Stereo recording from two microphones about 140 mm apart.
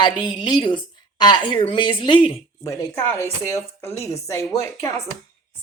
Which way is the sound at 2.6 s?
20° left (ahead or behind).